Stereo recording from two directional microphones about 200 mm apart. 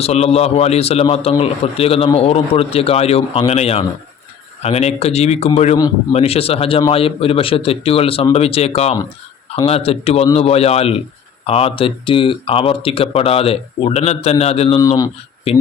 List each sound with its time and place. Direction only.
0.0 s a man's voice: 30° left (ahead or behind)
5.7 s speech: 20° left (ahead or behind)
6.1 s a man's voice: 30° left (ahead or behind)
14.8 s speech: 15° left (ahead or behind)